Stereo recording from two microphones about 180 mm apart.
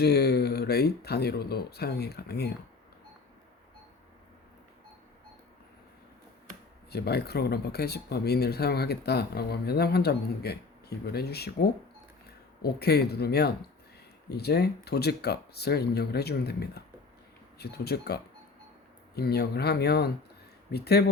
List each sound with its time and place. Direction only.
0.0 s speech: 65° left (ahead or behind)
6.9 s speech: 65° left (ahead or behind)